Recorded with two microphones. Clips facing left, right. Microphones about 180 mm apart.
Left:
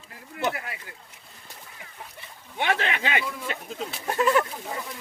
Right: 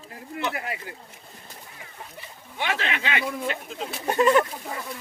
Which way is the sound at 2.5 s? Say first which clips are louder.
Left 2 dB; 55° left (ahead or behind).